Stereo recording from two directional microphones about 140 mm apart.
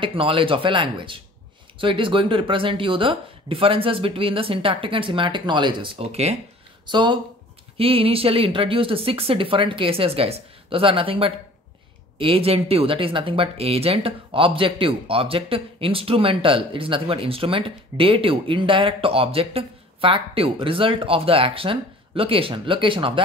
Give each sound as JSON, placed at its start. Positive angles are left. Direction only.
{"t": 0.0, "sound": "speech", "side_deg": -40}
{"t": 6.9, "sound": "speech", "side_deg": -35}